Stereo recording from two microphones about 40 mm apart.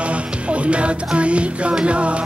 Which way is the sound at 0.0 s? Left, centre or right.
Right.